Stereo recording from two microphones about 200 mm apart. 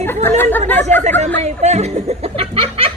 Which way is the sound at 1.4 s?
35° right (ahead or behind).